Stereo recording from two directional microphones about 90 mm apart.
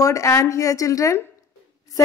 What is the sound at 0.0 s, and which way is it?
A woman's voice, 40° left (ahead or behind).